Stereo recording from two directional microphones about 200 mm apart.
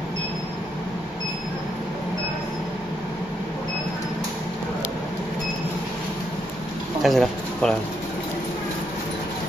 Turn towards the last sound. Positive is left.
turn(degrees=5)  # may be behind; listen again after turning